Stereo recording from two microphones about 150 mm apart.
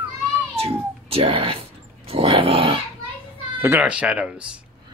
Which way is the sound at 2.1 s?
35° right (ahead or behind).